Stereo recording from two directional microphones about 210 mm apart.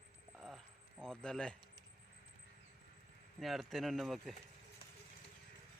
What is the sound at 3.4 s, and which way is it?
Speech, centre (ahead or behind).